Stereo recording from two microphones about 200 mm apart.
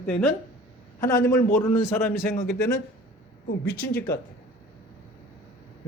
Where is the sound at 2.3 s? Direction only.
50° left (ahead or behind).